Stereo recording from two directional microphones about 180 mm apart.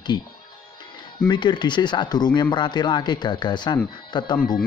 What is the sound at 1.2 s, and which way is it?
Speech, 25° left (ahead or behind).